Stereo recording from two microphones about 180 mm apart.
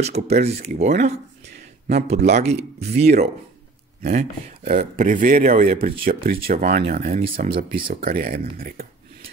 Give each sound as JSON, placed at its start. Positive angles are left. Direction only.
{"t": 0.4, "sound": "speech", "side_deg": -35}
{"t": 7.2, "sound": "speech", "side_deg": -30}
{"t": 8.0, "sound": "speech", "side_deg": -55}